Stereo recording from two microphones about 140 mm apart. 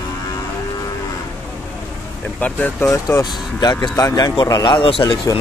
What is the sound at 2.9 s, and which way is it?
Speech, 25° left (ahead or behind).